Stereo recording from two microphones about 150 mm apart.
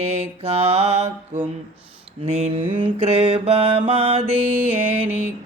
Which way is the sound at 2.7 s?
45° right (ahead or behind).